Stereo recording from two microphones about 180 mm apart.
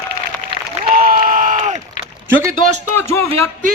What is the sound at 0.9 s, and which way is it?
Crowd, 50° right (ahead or behind).